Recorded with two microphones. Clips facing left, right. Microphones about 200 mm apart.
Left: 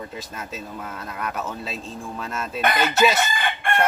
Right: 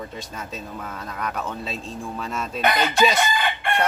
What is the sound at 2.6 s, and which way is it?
Chicken, 50° left (ahead or behind).